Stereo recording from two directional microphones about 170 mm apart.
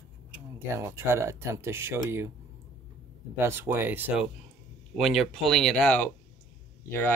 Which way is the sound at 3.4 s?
15° right (ahead or behind).